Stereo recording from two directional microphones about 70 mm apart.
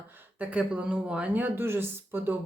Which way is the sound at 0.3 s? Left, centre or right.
Centre.